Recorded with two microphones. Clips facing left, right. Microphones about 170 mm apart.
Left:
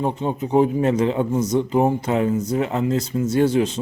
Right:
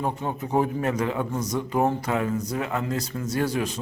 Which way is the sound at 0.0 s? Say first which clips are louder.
Left 5 dB; 20° left (ahead or behind).